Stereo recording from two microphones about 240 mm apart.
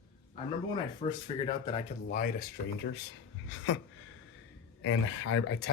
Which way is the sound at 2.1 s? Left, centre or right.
Left.